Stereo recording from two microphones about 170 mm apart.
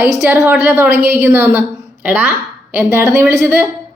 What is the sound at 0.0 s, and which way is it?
A woman's voice, 15° right (ahead or behind).